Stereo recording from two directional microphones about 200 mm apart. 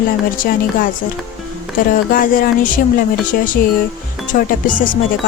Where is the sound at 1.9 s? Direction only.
45° left (ahead or behind).